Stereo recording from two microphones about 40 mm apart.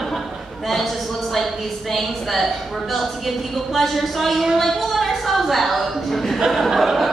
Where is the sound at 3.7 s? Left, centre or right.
Centre.